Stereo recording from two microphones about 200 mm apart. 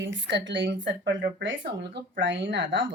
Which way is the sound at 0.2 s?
65° right (ahead or behind).